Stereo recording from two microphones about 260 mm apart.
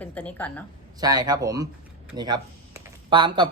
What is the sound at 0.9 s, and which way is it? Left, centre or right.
Speech, centre.